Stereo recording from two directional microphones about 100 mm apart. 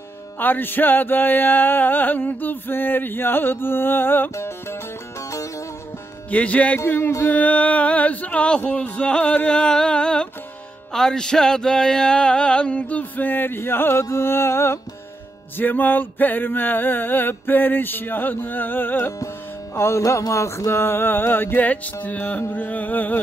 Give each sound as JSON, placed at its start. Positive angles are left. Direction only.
{"t": 0.4, "sound": "music", "side_deg": 20}
{"t": 6.3, "sound": "music", "side_deg": 15}